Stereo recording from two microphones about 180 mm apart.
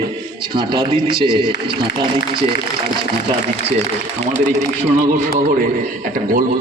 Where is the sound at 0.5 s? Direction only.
25° right (ahead or behind).